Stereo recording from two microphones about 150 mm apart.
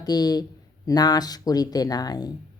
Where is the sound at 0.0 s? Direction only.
25° left (ahead or behind).